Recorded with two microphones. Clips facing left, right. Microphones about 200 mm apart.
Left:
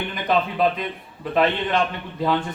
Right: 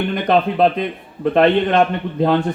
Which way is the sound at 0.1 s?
55° right (ahead or behind).